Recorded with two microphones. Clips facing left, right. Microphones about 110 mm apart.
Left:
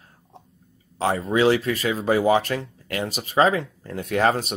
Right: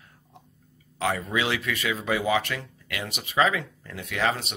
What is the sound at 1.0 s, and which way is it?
Speech, 35° left (ahead or behind).